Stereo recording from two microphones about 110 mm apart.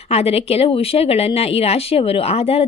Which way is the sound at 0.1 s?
70° left (ahead or behind).